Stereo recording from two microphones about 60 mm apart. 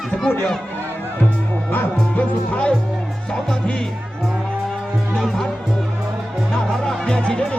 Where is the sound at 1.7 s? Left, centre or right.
Left.